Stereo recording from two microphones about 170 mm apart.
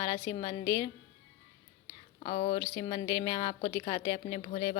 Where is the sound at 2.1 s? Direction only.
35° left (ahead or behind).